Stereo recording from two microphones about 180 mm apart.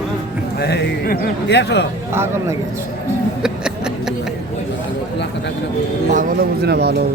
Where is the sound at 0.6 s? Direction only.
70° left (ahead or behind).